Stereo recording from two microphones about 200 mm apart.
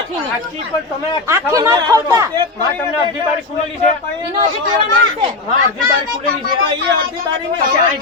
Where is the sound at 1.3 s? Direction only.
15° right (ahead or behind).